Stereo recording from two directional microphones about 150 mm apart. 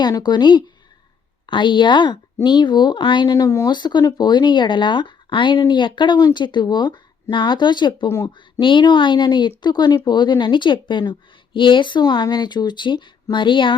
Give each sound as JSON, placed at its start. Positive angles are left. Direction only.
{"t": 0.0, "sound": "speech", "side_deg": 30}
{"t": 8.6, "sound": "speech", "side_deg": 30}